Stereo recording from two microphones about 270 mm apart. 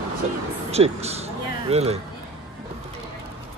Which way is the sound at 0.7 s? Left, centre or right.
Right.